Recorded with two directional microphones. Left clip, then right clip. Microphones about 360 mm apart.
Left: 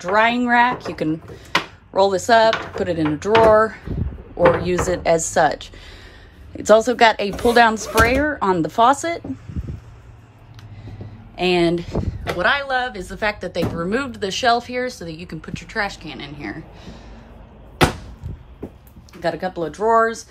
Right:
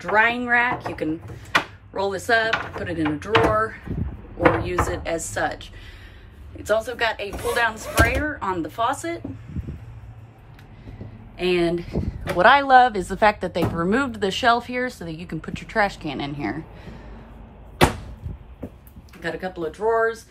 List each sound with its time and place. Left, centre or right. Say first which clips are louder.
0.0 s speech: left 2 dB; centre
11.3 s speech: left 4 dB; centre
12.4 s a woman's voice: right 6 dB; centre
19.2 s speech: left 5 dB; centre